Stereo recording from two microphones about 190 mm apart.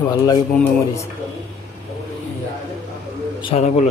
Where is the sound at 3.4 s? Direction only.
30° left (ahead or behind).